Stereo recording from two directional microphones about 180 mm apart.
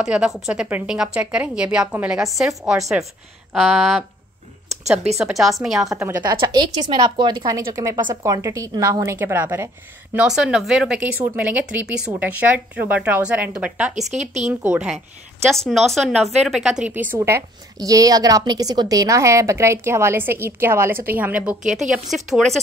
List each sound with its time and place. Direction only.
0.0 s a woman's voice: 5° right (ahead or behind)
5.2 s a woman's voice: centre (ahead or behind)
5.9 s a woman's voice: 15° right (ahead or behind)
13.9 s speech: 40° right (ahead or behind)
14.5 s a woman's voice: 10° right (ahead or behind)